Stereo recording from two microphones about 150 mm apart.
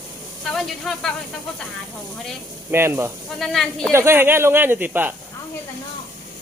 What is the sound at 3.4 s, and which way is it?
Speech, 5° left (ahead or behind).